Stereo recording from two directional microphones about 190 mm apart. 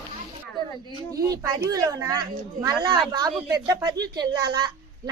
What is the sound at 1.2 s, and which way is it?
A woman's voice, 20° right (ahead or behind).